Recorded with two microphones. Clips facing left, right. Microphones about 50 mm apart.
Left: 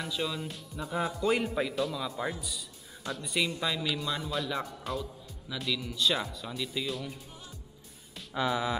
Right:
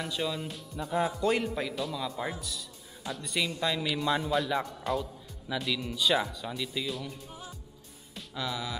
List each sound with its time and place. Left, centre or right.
0.0 s speech: centre
3.9 s speech: centre
4.3 s speech: centre
8.4 s speech: left